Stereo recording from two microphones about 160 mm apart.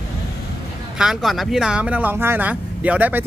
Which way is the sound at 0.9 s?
Centre (ahead or behind).